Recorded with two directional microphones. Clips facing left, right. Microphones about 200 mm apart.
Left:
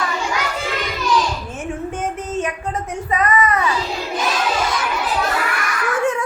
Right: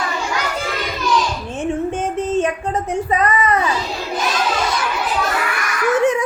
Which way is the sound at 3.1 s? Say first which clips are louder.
Left 2 dB; 30° right (ahead or behind).